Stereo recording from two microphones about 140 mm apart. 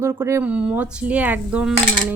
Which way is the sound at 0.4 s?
10° right (ahead or behind).